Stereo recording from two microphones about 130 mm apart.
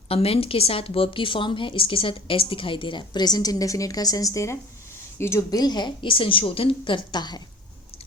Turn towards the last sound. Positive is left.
turn(degrees=35)  # may be behind; listen again after turning